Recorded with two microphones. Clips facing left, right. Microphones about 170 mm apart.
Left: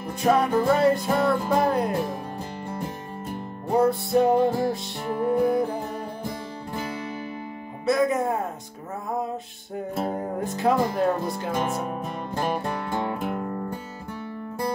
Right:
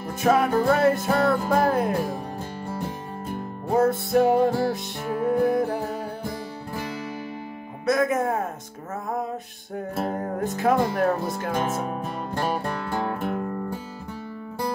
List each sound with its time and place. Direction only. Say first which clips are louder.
0.2 s music: even; centre (ahead or behind)
3.6 s music: even; centre (ahead or behind)
8.1 s speech: right 1 dB; 15° left (ahead or behind)
9.8 s music: even; centre (ahead or behind)